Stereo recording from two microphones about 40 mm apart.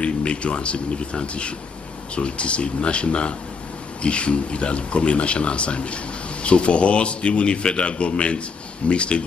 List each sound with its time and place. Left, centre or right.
0.0 s a man's voice: left